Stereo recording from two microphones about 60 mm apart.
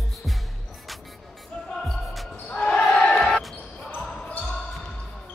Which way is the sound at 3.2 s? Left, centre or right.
Centre.